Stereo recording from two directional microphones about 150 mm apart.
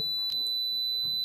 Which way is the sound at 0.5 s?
Centre (ahead or behind).